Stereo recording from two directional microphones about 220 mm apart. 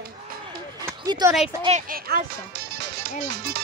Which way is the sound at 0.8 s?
15° right (ahead or behind).